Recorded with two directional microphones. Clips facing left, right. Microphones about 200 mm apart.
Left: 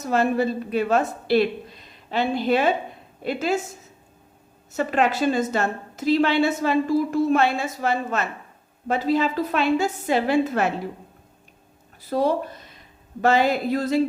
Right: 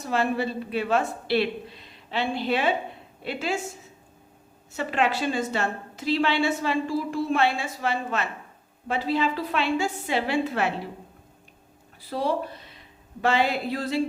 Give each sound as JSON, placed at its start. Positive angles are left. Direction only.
{"t": 0.0, "sound": "a woman's voice", "side_deg": 45}
{"t": 4.7, "sound": "a woman's voice", "side_deg": 45}
{"t": 12.0, "sound": "speech", "side_deg": 45}
{"t": 13.2, "sound": "a sound", "side_deg": 40}